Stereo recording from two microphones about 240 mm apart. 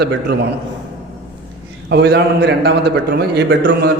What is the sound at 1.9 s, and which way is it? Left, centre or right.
A man's voice, right.